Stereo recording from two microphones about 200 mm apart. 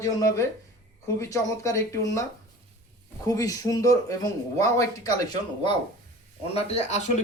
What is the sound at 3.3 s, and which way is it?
Speech, 15° left (ahead or behind).